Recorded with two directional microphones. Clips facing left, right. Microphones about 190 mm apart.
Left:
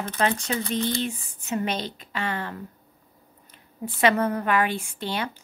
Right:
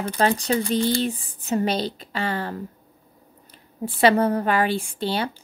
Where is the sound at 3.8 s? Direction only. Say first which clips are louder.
Right 4 dB; 30° right (ahead or behind).